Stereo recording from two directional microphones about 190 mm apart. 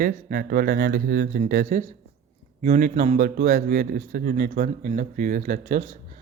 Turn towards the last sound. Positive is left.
turn(degrees=-45)  # may be behind; listen again after turning